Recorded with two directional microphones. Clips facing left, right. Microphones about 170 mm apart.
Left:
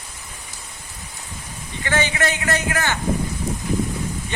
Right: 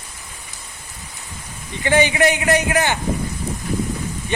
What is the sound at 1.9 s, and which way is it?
A man's voice, 15° right (ahead or behind).